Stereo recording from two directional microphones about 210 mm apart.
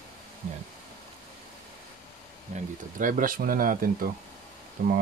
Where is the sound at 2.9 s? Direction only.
40° right (ahead or behind).